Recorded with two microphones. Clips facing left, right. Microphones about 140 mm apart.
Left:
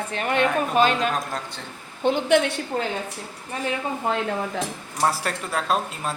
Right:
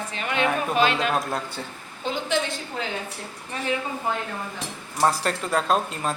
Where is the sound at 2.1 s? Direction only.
60° left (ahead or behind).